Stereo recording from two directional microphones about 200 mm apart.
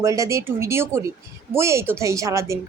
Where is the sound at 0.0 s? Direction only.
15° right (ahead or behind).